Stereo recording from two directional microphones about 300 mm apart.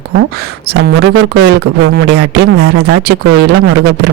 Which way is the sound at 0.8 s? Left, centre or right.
Right.